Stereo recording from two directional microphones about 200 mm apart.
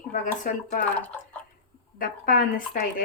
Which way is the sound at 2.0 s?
45° left (ahead or behind).